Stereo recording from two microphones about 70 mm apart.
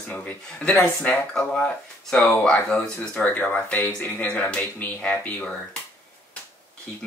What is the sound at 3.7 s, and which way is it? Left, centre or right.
Speech, left.